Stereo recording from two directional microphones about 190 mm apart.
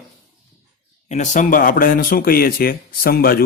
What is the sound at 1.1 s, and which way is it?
Speech, 40° left (ahead or behind).